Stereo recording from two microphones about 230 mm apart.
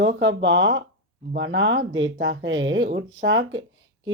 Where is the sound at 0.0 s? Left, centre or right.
Right.